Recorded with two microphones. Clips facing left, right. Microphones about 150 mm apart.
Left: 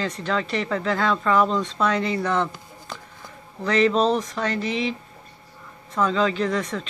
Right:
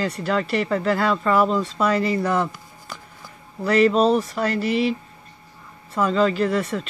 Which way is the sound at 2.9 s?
25° left (ahead or behind).